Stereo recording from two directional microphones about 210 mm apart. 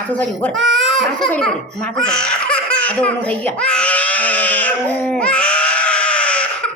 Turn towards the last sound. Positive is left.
turn(degrees=5)  # may be behind; listen again after turning